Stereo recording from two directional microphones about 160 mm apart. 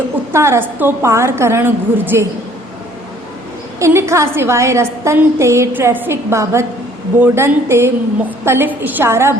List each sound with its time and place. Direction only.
0.3 s a woman's voice: 15° right (ahead or behind)
3.8 s a woman's voice: 20° right (ahead or behind)